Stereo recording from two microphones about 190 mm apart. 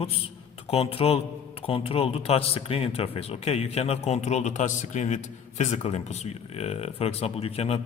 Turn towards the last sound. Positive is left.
turn(degrees=35)  # may be behind; listen again after turning